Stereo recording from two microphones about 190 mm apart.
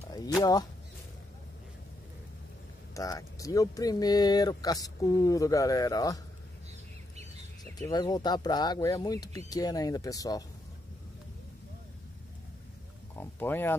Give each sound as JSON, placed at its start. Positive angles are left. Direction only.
{"t": 0.4, "sound": "speech", "side_deg": 20}
{"t": 2.9, "sound": "speech", "side_deg": 15}
{"t": 7.8, "sound": "speech", "side_deg": 20}
{"t": 13.2, "sound": "speech", "side_deg": 10}